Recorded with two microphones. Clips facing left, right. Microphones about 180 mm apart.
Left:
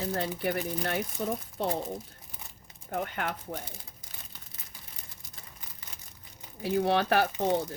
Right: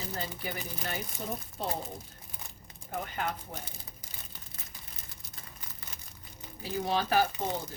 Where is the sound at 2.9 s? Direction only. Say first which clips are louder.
Left 2 dB; 65° left (ahead or behind).